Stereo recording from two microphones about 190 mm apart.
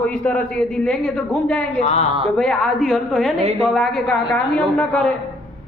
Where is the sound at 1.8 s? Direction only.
35° left (ahead or behind).